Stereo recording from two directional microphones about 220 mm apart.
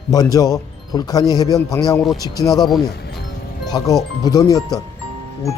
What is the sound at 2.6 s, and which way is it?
Speech, centre (ahead or behind).